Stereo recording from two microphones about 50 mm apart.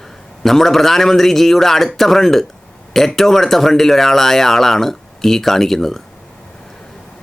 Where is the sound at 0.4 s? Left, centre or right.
Centre.